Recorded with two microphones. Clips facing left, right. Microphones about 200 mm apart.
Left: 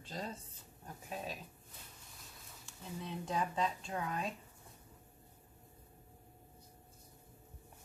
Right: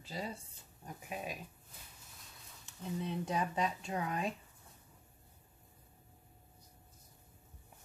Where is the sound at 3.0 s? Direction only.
20° right (ahead or behind).